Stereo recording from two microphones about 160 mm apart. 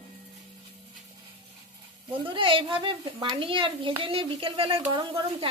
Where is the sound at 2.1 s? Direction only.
30° right (ahead or behind).